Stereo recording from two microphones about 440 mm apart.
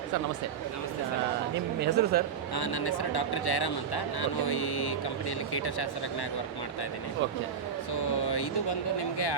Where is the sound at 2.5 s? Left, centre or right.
Left.